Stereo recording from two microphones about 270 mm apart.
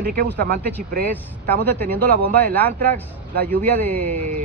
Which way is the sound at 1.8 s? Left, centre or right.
Centre.